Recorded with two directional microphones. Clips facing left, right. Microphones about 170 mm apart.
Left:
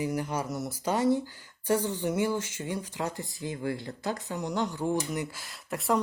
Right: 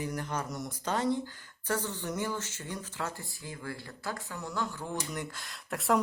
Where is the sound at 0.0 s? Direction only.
10° left (ahead or behind).